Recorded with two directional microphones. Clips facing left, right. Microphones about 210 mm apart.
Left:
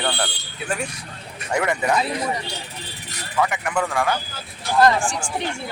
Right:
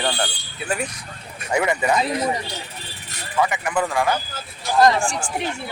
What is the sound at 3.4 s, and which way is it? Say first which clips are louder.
Speech: right 1 dB; 5° right (ahead or behind).